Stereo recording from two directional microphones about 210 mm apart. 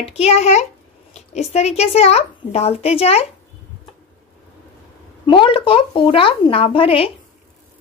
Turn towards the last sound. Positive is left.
turn(degrees=25)  # may be behind; listen again after turning